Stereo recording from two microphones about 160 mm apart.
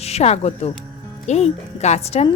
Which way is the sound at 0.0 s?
40° left (ahead or behind).